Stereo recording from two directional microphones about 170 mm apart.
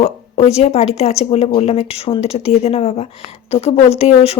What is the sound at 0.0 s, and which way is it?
A woman's voice, 40° left (ahead or behind).